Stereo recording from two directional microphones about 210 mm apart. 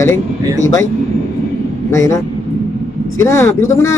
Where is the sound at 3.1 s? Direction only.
15° left (ahead or behind).